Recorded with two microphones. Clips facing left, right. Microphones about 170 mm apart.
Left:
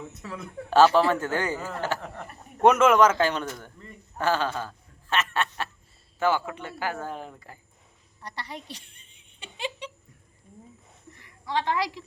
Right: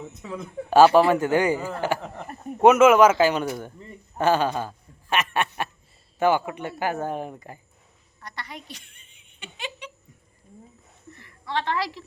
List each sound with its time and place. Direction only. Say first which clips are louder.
0.3 s a man's voice: right 4 dB; 15° right (ahead or behind)
8.2 s a sound: left 1 dB; 35° left (ahead or behind)
11.2 s a woman's voice: even; 15° left (ahead or behind)